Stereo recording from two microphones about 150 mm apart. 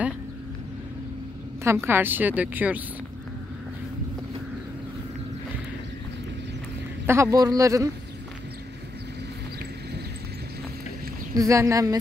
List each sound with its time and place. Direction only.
1.6 s a woman's voice: 15° right (ahead or behind)
7.1 s a man's voice: 20° right (ahead or behind)
11.3 s a man's voice: 20° right (ahead or behind)